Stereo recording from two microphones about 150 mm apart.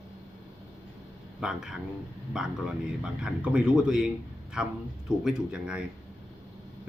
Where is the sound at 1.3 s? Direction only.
5° right (ahead or behind).